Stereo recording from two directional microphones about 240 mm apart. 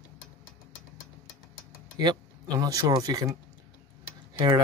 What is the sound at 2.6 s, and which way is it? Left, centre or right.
Speech, centre.